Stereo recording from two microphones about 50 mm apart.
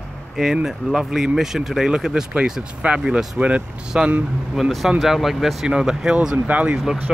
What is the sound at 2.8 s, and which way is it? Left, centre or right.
Speech, right.